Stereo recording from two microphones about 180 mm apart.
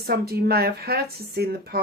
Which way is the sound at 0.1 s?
60° right (ahead or behind).